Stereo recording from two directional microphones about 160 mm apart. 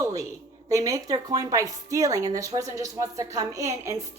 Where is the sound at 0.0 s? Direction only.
20° right (ahead or behind).